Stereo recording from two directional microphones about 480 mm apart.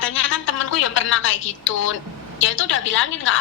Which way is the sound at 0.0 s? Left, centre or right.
Left.